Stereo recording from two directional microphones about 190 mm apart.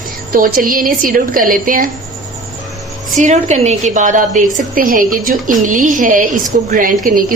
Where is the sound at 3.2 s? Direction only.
40° right (ahead or behind).